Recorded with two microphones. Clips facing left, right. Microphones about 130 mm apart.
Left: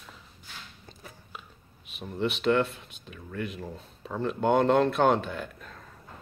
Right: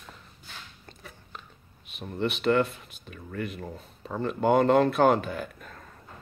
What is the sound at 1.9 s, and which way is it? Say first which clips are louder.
Speech: even; centre (ahead or behind).